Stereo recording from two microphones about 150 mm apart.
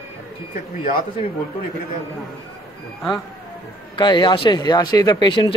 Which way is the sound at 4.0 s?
30° left (ahead or behind).